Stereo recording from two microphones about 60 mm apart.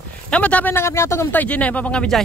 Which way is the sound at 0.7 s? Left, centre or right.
Left.